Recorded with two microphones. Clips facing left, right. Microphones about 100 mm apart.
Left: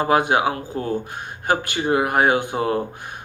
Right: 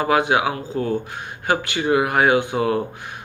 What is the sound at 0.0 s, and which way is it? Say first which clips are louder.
Speech: even; 40° left (ahead or behind).